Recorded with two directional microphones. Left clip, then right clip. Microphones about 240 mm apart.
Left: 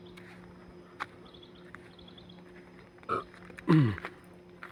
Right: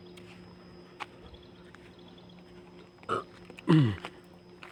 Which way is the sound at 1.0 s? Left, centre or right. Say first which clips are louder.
Left 2 dB; centre.